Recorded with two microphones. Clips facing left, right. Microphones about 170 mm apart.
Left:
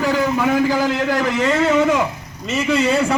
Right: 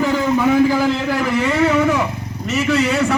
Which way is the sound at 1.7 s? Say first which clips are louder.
Left 1 dB; 20° left (ahead or behind).